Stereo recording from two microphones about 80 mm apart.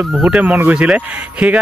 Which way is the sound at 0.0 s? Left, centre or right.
Centre.